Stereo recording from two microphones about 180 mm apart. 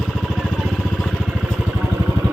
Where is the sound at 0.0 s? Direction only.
Centre (ahead or behind).